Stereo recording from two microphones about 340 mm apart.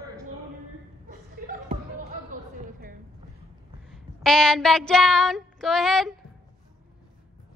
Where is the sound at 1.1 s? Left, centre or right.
Right.